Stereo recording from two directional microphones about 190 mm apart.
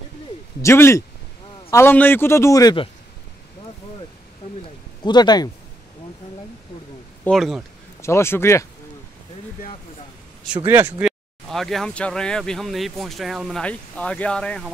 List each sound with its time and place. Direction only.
0.6 s a man's voice: 15° left (ahead or behind)
4.6 s a sound: 25° left (ahead or behind)
7.2 s speech: centre (ahead or behind)
8.0 s a man's voice: 15° left (ahead or behind)
10.4 s speech: 10° right (ahead or behind)